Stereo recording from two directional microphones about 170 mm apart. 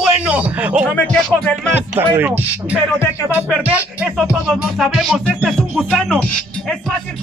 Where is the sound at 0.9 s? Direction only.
5° left (ahead or behind).